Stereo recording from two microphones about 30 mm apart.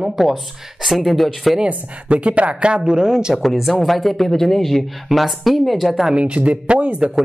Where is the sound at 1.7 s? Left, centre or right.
Right.